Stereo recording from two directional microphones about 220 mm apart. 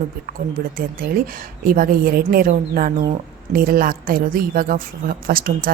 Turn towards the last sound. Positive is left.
turn(degrees=-40)  # may be behind; listen again after turning